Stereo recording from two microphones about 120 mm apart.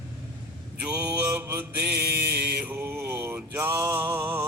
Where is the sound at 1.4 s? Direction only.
20° right (ahead or behind).